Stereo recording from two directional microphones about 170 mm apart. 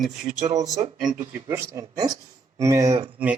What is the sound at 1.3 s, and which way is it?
Speech, 15° right (ahead or behind).